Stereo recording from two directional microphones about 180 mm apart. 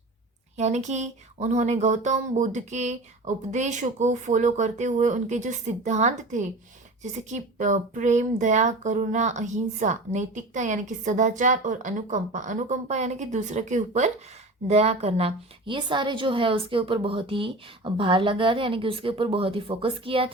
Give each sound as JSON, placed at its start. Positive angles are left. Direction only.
{"t": 0.5, "sound": "a woman's voice", "side_deg": -40}